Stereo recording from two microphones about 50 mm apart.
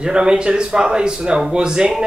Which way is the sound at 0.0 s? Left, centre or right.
Centre.